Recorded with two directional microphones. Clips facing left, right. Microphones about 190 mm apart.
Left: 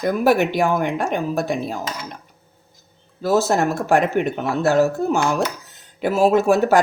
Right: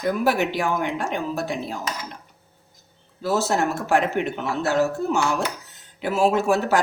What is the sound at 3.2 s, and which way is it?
Speech, 45° left (ahead or behind).